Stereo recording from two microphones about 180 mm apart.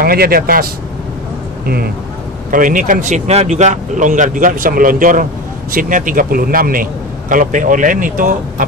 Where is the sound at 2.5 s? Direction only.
45° right (ahead or behind).